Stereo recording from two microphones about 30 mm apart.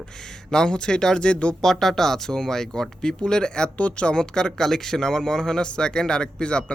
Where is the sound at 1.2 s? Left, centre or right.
Left.